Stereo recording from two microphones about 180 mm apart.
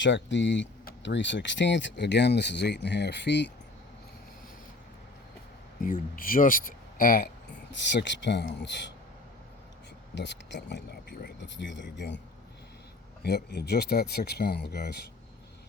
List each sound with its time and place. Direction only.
0.0 s speech: 85° left
5.8 s speech: 50° left (ahead or behind)
7.8 s speech: 75° left (ahead or behind)
10.2 s speech: 75° left (ahead or behind)
13.2 s speech: 65° left (ahead or behind)